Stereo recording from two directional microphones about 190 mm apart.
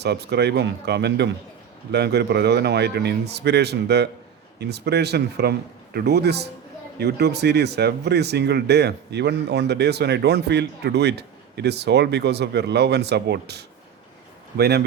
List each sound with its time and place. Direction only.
0.0 s speech: 60° right (ahead or behind)